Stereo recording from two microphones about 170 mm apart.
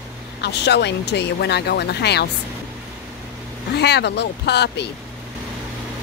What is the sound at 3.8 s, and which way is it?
Speech, 80° left.